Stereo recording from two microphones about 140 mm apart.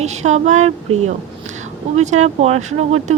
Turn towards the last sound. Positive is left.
turn(degrees=-55)  # may be behind; listen again after turning